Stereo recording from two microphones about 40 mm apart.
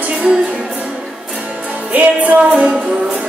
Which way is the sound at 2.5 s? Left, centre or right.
Centre.